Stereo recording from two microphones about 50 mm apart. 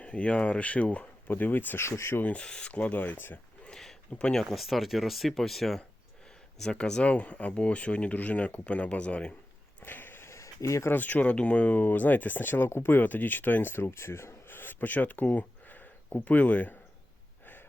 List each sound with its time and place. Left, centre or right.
0.0 s speech: left
1.3 s speech: left
1.8 s speech: left
2.2 s speech: left
4.1 s speech: left
4.4 s speech: centre
6.6 s speech: centre
9.8 s a sound: left
10.2 s a sound: left
10.9 s speech: left
11.8 s speech: left